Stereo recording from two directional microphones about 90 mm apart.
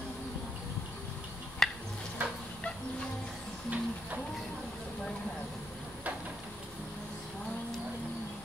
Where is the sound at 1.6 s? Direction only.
5° left (ahead or behind).